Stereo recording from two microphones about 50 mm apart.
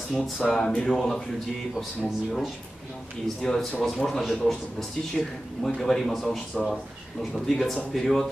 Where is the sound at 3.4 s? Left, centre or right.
Centre.